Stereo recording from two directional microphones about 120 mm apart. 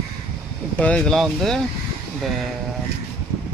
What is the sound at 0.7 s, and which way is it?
Speech, 10° left (ahead or behind).